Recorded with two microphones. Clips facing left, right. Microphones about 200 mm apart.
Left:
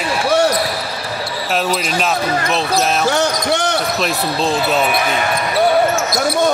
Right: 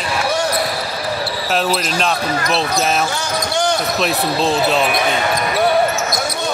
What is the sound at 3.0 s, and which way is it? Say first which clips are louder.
Speech: left 6 dB; 65° left (ahead or behind).